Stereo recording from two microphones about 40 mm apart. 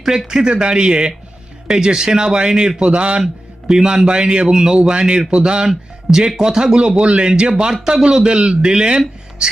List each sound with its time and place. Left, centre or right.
0.3 s speech: right